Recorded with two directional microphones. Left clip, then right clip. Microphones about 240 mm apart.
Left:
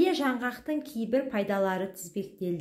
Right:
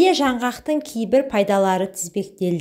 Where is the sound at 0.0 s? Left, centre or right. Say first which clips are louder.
Right 10 dB; right.